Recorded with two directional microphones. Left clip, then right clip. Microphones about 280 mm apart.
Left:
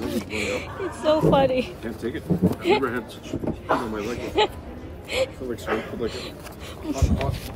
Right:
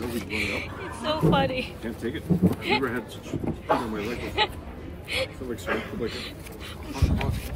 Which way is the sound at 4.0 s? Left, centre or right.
Centre.